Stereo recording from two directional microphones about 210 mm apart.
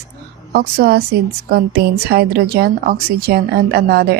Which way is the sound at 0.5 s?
50° right (ahead or behind).